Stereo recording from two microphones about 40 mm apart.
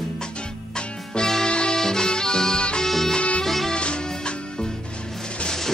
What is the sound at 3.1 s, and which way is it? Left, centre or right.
Music, left.